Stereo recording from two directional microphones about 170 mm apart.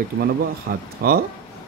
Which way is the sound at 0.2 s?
65° right (ahead or behind).